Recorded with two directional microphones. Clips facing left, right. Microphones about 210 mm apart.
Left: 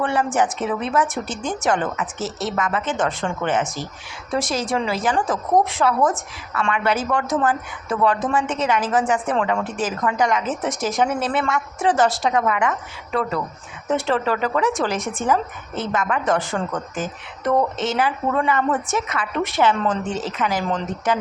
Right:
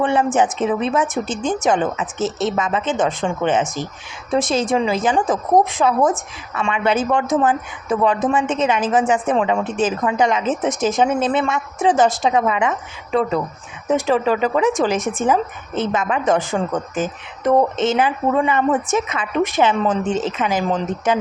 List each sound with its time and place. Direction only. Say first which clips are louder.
0.0 s a woman's voice: right 4 dB; 20° right (ahead or behind)